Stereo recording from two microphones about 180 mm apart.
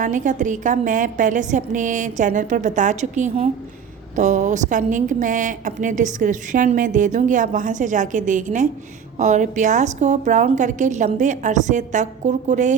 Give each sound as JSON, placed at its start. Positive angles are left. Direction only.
{"t": 0.0, "sound": "a woman's voice", "side_deg": -45}